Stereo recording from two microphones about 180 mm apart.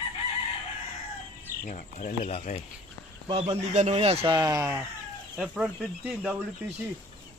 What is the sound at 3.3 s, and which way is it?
Speech, 35° right (ahead or behind).